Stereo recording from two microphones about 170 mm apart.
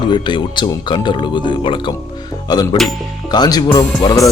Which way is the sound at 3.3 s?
25° left (ahead or behind).